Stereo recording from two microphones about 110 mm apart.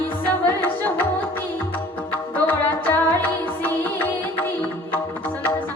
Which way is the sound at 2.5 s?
15° left (ahead or behind).